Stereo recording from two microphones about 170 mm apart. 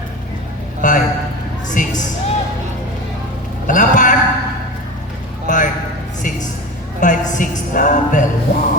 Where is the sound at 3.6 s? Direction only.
50° left (ahead or behind).